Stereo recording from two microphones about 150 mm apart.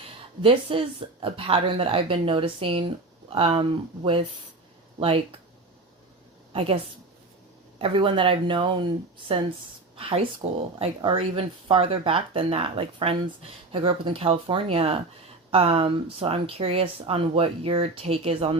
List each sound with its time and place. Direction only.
0.4 s speech: 35° right (ahead or behind)
6.5 s a woman's voice: 40° right (ahead or behind)
7.8 s speech: 35° right (ahead or behind)